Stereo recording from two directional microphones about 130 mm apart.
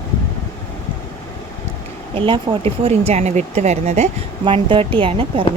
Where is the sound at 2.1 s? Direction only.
45° right (ahead or behind); by 4.1 s 60° right (ahead or behind).